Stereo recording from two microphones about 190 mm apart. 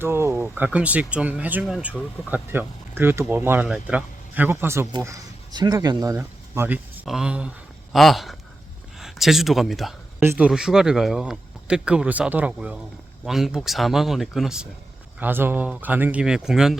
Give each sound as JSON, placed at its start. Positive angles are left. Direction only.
{"t": 0.0, "sound": "a man's voice", "side_deg": -15}